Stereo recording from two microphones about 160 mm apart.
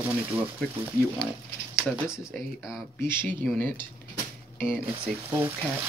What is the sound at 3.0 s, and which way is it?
Speech, 15° left (ahead or behind).